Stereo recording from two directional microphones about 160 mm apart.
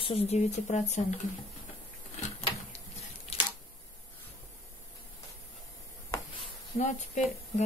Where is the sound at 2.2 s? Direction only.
45° left (ahead or behind).